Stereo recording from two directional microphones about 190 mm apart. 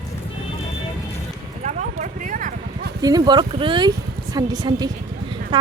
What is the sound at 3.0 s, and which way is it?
A woman's voice, 20° right (ahead or behind).